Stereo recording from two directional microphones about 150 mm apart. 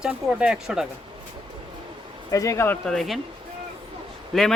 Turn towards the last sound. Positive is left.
turn(degrees=0)  # may be behind; listen again after turning